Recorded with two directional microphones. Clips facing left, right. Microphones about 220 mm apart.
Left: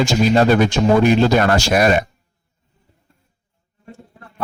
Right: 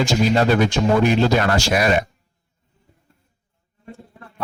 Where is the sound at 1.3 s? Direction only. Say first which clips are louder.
Left 4 dB; 45° left (ahead or behind).